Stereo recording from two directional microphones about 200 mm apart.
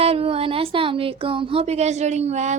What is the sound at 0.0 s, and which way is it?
Speech, 30° right (ahead or behind).